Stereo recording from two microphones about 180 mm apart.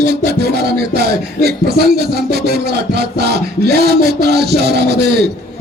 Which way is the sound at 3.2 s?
65° right (ahead or behind).